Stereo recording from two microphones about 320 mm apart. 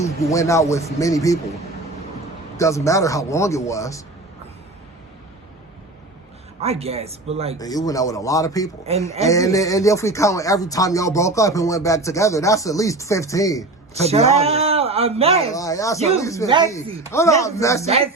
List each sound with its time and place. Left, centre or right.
0.0 s speech: centre
2.6 s speech: centre
6.6 s a man's voice: centre
7.6 s speech: centre
14.0 s a man's voice: centre
15.5 s speech: centre
17.8 s a man's voice: centre